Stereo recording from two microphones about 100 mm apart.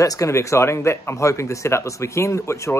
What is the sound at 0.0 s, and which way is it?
A man's voice, 35° left (ahead or behind).